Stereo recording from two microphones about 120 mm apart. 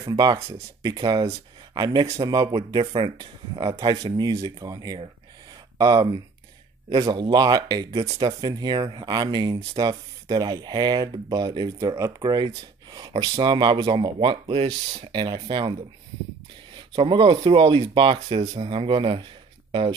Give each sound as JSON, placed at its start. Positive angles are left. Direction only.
{"t": 0.0, "sound": "speech", "side_deg": -35}
{"t": 2.8, "sound": "speech", "side_deg": -50}
{"t": 3.2, "sound": "speech", "side_deg": -40}
{"t": 15.1, "sound": "speech", "side_deg": -45}
{"t": 16.7, "sound": "speech", "side_deg": -45}